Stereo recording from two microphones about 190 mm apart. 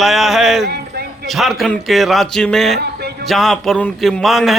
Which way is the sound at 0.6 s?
55° right (ahead or behind).